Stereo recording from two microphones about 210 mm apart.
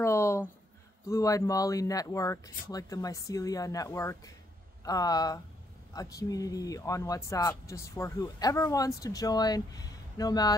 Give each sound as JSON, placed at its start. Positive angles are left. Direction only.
{"t": 0.0, "sound": "speech", "side_deg": 15}